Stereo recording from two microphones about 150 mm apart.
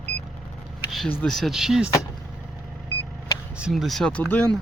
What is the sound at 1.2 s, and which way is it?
Speech, centre (ahead or behind).